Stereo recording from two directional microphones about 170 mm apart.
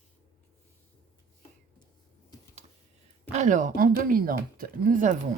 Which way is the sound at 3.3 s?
45° right (ahead or behind).